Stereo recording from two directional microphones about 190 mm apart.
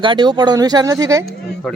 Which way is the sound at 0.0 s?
25° right (ahead or behind).